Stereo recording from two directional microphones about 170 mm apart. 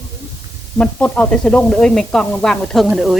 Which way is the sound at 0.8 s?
10° left (ahead or behind).